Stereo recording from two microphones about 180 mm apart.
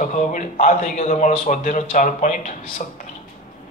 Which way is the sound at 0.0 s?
45° left (ahead or behind).